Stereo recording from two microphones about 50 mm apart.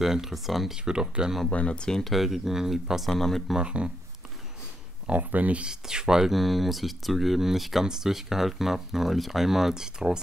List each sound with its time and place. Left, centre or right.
0.0 s speech: centre
0.8 s speech: centre
1.5 s speech: left
2.0 s speech: centre
3.5 s speech: right
5.1 s speech: right
5.7 s speech: centre
6.3 s speech: centre